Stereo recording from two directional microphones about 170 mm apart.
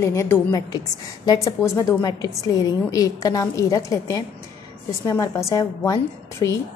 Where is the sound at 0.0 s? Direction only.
15° left (ahead or behind).